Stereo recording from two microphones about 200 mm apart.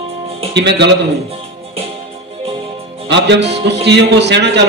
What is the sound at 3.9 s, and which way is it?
Speech, 60° right (ahead or behind).